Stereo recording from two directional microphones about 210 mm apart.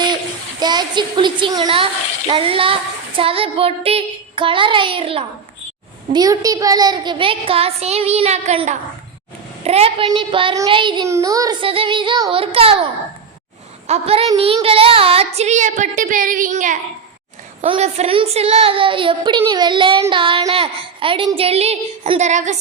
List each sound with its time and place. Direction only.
0.6 s a woman's voice: 20° right (ahead or behind)